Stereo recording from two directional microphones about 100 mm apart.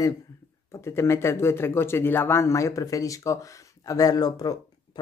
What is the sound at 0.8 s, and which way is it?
Speech, 25° left (ahead or behind).